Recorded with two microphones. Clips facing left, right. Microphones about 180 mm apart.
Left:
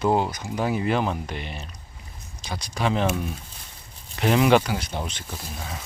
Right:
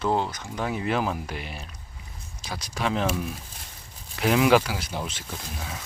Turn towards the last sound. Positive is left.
turn(degrees=0)  # may be behind; listen again after turning